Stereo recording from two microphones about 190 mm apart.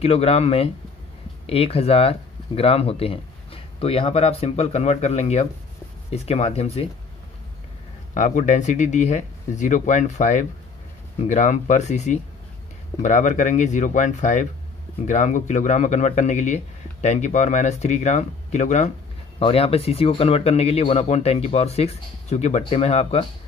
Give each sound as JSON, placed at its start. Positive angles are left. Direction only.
{"t": 0.0, "sound": "speech", "side_deg": 30}
{"t": 8.1, "sound": "speech", "side_deg": 40}